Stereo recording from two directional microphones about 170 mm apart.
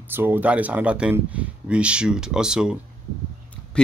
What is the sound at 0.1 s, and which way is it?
Speech, 10° right (ahead or behind).